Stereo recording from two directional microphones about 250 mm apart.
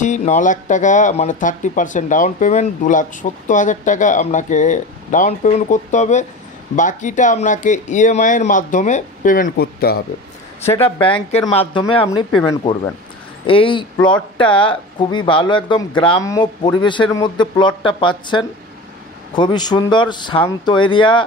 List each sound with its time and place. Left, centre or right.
0.0 s speech: left
10.8 s speech: left
13.5 s speech: centre